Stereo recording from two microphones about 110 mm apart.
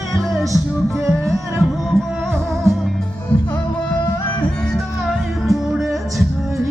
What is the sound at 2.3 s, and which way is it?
Music, 25° right (ahead or behind).